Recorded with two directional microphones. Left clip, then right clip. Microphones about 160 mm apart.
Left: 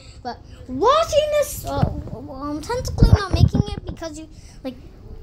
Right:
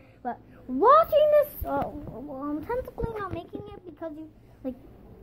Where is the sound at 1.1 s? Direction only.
40° right (ahead or behind).